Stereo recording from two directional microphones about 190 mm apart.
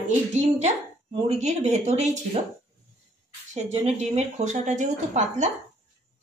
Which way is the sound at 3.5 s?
35° right (ahead or behind).